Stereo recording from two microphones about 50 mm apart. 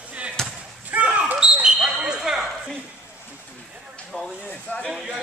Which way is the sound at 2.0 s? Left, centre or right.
Centre.